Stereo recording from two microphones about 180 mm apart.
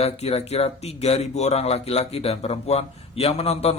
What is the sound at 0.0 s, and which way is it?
Speech, 35° left (ahead or behind).